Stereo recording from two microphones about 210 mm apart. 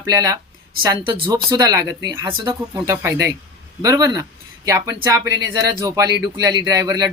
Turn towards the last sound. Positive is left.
turn(degrees=-15)  # may be behind; listen again after turning